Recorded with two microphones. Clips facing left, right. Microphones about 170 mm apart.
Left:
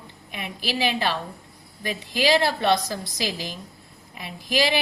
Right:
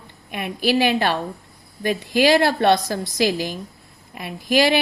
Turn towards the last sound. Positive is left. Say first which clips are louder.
# right 6 dB
turn(degrees=-55)  # may be behind; listen again after turning